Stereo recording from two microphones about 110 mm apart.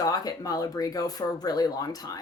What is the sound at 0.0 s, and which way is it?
Speech, 35° left (ahead or behind).